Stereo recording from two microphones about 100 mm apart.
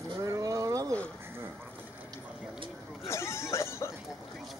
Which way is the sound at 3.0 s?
30° left (ahead or behind).